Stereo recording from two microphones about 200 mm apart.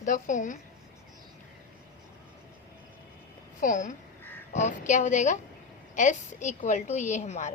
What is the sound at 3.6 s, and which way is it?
A woman's voice, 40° left (ahead or behind).